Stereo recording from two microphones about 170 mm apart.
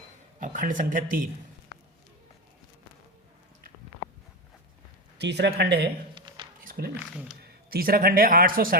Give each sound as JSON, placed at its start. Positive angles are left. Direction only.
{"t": 0.3, "sound": "speech", "side_deg": -50}
{"t": 5.1, "sound": "speech", "side_deg": -85}
{"t": 6.1, "sound": "a sound", "side_deg": -25}
{"t": 6.7, "sound": "a sound", "side_deg": -60}
{"t": 6.9, "sound": "speech", "side_deg": -10}
{"t": 7.4, "sound": "a man's voice", "side_deg": -65}